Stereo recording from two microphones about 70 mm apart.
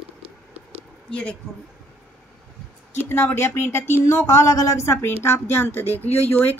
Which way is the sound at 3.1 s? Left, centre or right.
Left.